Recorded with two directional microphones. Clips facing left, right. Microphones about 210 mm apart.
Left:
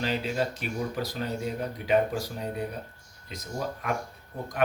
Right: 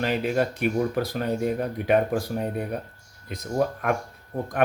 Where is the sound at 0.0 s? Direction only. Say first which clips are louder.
Right 5 dB; 55° right (ahead or behind).